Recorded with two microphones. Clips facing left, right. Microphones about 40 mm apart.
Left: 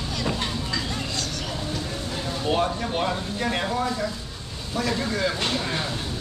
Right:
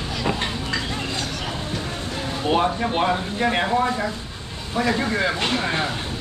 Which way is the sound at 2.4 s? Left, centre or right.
Right.